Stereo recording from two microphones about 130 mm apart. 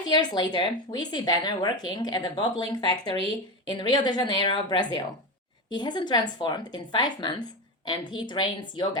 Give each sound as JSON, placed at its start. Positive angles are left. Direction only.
{"t": 0.1, "sound": "speech", "side_deg": 35}